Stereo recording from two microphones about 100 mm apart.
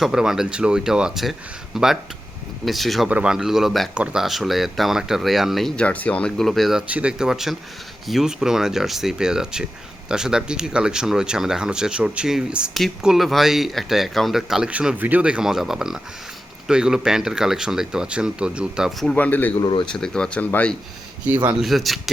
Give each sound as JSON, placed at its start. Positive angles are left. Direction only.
{"t": 0.0, "sound": "speech", "side_deg": -5}
{"t": 3.1, "sound": "speech", "side_deg": -10}
{"t": 5.7, "sound": "speech", "side_deg": 15}
{"t": 6.8, "sound": "speech", "side_deg": -15}
{"t": 19.1, "sound": "speech", "side_deg": 15}
{"t": 19.5, "sound": "speech", "side_deg": 55}
{"t": 19.9, "sound": "speech", "side_deg": 10}
{"t": 21.6, "sound": "speech", "side_deg": 0}